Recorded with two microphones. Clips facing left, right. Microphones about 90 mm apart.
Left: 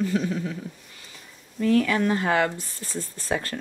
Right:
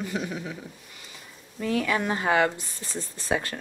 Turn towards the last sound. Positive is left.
turn(degrees=-20)  # may be behind; listen again after turning